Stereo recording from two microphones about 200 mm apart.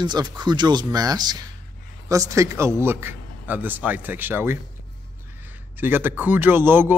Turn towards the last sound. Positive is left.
turn(degrees=-10)  # may be behind; listen again after turning